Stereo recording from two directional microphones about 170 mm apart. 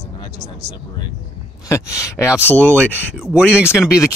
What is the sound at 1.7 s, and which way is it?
Speech, 20° left (ahead or behind).